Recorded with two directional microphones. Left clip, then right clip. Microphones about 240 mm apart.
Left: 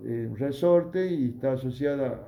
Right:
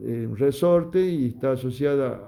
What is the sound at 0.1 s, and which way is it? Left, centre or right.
A man's voice, right.